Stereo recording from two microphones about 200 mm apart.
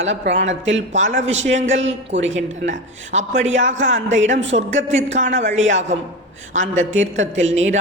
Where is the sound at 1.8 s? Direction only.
70° right (ahead or behind).